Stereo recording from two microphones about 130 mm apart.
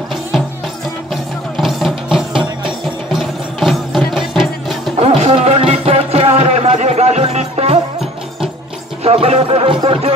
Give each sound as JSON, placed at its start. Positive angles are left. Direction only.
{"t": 1.1, "sound": "music", "side_deg": 0}
{"t": 4.9, "sound": "music", "side_deg": -55}
{"t": 9.0, "sound": "speech", "side_deg": -50}